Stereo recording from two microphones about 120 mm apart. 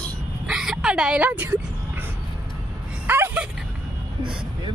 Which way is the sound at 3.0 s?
15° right (ahead or behind).